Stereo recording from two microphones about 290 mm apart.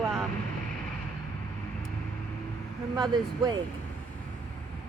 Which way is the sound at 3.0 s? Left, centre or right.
Centre.